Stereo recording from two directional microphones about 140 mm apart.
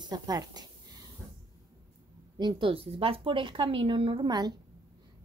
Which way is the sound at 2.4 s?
35° right (ahead or behind).